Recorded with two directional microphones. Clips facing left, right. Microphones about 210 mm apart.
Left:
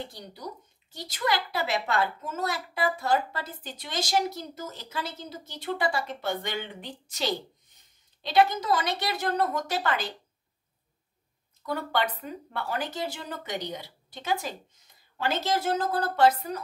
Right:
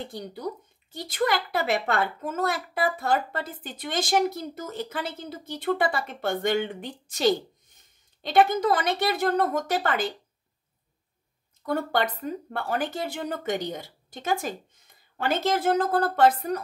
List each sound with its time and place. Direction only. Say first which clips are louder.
0.0 s a woman's voice: right 6 dB; 50° right (ahead or behind)
11.6 s a woman's voice: right 3 dB; 45° right (ahead or behind)